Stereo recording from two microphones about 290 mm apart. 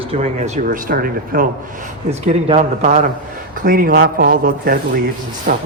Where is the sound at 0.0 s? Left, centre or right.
Right.